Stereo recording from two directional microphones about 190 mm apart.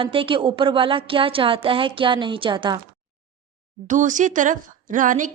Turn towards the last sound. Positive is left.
turn(degrees=-45)  # may be behind; listen again after turning